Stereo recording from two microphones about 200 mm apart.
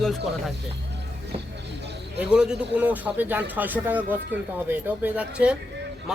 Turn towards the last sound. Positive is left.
turn(degrees=-5)  # may be behind; listen again after turning